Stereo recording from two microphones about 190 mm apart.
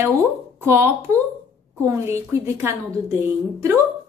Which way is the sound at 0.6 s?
15° right (ahead or behind).